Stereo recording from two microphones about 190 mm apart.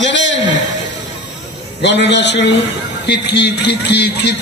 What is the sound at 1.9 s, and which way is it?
Speech, 65° left (ahead or behind).